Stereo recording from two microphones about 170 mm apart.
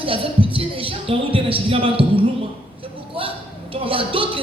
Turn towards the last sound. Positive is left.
turn(degrees=-30)  # may be behind; listen again after turning